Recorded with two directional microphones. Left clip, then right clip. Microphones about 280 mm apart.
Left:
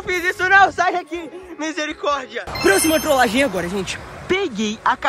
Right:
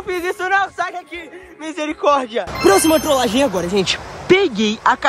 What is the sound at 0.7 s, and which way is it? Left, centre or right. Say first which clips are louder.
Speech: left 4 dB; centre.